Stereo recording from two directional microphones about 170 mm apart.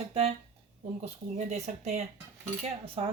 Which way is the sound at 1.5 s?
40° right (ahead or behind).